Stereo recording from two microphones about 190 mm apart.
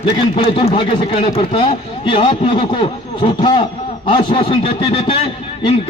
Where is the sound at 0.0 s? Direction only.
30° left (ahead or behind).